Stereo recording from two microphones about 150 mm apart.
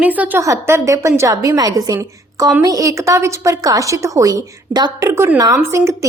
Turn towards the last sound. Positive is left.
turn(degrees=-20)  # may be behind; listen again after turning